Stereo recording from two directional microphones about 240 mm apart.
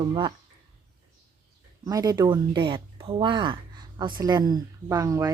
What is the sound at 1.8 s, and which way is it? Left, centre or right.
Speech, centre.